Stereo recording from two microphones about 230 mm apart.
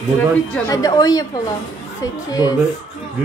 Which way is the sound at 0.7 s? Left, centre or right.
Centre.